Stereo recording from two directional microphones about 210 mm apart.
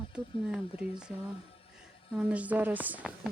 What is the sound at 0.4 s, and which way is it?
Speech, 5° right (ahead or behind).